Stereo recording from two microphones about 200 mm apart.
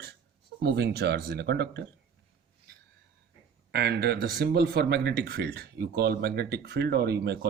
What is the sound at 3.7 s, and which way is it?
Speech, 55° right (ahead or behind).